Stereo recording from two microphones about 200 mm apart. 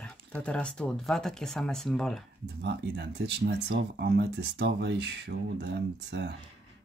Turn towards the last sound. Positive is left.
turn(degrees=-60)  # may be behind; listen again after turning